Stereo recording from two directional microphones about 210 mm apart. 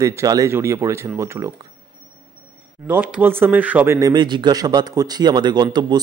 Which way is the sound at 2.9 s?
5° right (ahead or behind).